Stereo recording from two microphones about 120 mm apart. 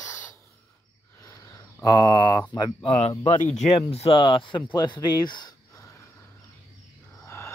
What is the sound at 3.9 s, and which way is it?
Speech, 50° left (ahead or behind).